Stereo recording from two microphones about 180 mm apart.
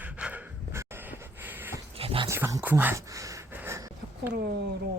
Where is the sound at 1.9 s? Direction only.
30° right (ahead or behind).